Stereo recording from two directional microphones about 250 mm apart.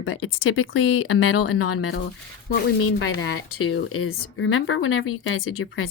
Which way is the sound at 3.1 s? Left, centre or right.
Left.